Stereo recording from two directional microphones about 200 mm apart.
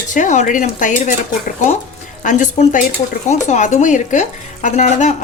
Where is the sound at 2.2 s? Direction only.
40° left (ahead or behind).